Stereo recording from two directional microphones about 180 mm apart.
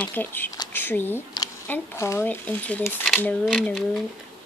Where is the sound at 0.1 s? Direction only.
10° left (ahead or behind).